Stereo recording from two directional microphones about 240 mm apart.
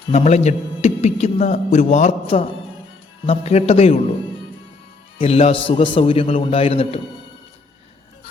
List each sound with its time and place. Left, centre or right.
0.1 s a man's voice: left
5.1 s a man's voice: left